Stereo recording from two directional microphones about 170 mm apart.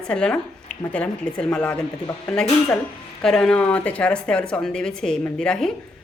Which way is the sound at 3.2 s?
Centre (ahead or behind).